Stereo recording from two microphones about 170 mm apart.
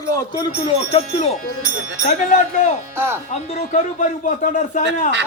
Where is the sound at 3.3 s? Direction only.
45° left (ahead or behind).